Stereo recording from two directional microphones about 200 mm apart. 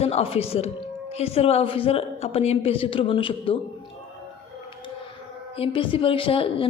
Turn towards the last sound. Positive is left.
turn(degrees=25)  # may be behind; listen again after turning